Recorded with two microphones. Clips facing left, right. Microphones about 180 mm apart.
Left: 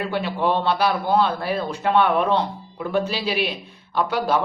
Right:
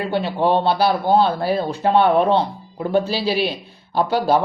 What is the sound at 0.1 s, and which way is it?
Speech, 30° right (ahead or behind).